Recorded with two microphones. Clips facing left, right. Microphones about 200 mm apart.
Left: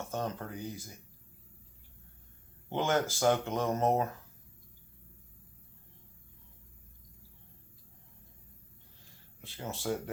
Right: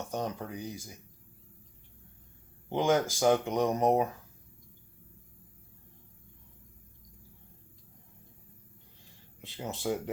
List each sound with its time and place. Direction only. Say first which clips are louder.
0.0 s speech: right 1 dB; 15° right (ahead or behind)
2.6 s speech: right 3 dB; 15° right (ahead or behind)
9.4 s speech: right 3 dB; 20° right (ahead or behind)